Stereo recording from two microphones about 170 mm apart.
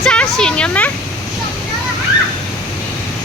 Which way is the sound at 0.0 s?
5° left (ahead or behind).